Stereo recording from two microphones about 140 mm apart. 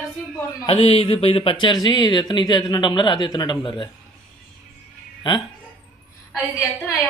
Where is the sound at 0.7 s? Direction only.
45° left (ahead or behind).